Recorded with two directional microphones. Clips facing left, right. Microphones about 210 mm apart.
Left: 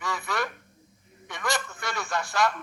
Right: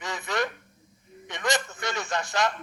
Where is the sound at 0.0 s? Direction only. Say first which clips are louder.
Right 1 dB; 20° right (ahead or behind).